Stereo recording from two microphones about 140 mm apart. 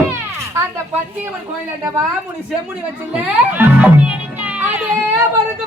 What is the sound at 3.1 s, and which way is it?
Speech, 10° right (ahead or behind).